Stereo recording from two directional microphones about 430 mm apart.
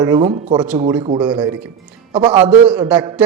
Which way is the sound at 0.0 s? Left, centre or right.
Centre.